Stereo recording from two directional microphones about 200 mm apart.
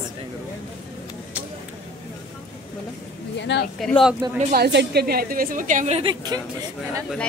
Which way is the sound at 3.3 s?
60° left (ahead or behind).